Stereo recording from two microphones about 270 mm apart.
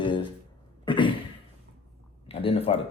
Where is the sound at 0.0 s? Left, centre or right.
Centre.